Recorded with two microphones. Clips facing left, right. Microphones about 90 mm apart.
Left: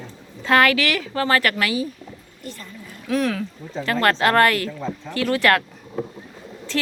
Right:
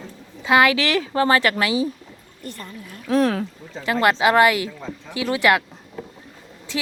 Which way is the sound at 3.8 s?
15° right (ahead or behind).